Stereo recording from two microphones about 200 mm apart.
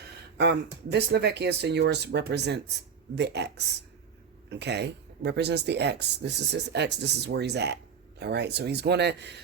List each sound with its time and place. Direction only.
0.9 s speech: 55° right (ahead or behind)